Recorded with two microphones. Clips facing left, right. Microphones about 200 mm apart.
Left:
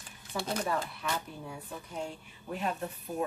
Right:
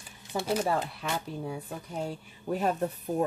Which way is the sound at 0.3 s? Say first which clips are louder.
Right 5 dB; 20° right (ahead or behind).